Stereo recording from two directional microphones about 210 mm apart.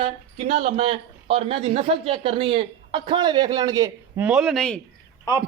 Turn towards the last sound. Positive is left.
turn(degrees=20)  # may be behind; listen again after turning